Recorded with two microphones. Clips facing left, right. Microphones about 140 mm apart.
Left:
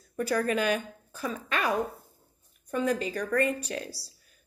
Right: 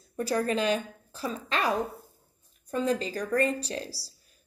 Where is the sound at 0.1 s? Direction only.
30° right (ahead or behind).